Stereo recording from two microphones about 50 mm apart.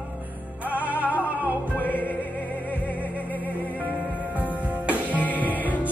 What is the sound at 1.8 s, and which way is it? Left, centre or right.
Music, left.